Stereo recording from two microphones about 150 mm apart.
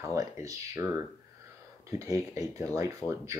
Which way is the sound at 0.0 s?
20° right (ahead or behind).